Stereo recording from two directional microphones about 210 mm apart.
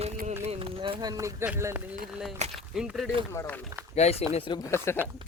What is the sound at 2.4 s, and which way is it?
Speech, 35° right (ahead or behind).